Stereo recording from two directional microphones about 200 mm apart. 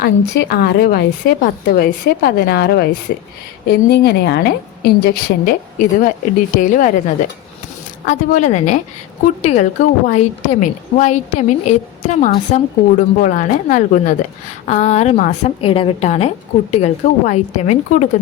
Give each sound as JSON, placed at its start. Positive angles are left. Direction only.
{"t": 0.0, "sound": "a woman's voice", "side_deg": 50}